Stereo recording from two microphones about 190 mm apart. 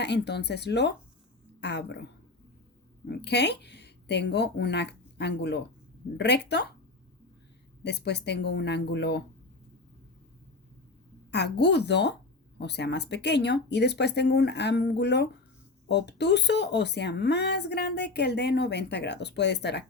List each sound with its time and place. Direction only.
0.0 s speech: 60° left (ahead or behind)
3.1 s speech: 60° left (ahead or behind)
7.9 s speech: 60° left (ahead or behind)
11.3 s speech: 65° left (ahead or behind)